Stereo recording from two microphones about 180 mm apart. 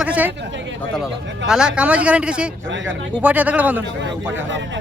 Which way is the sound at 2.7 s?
90° right.